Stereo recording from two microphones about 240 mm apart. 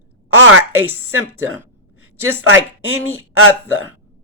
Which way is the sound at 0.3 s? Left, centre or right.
Right.